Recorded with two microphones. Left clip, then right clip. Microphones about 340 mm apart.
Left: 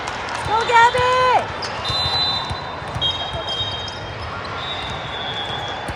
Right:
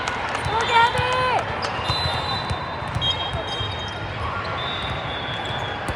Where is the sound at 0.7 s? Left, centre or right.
Left.